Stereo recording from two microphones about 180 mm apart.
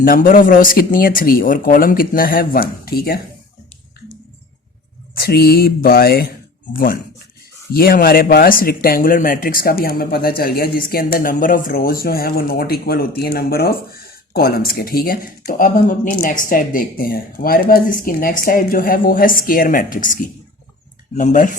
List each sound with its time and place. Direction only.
0.0 s speech: 50° left (ahead or behind)
5.1 s speech: 60° left (ahead or behind)